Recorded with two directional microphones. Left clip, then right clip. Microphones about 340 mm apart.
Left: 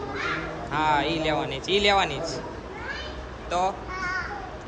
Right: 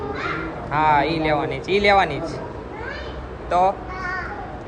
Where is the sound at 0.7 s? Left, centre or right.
Centre.